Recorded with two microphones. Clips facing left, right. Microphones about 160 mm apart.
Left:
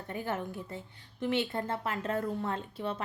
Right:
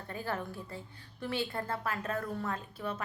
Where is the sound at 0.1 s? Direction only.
20° left (ahead or behind).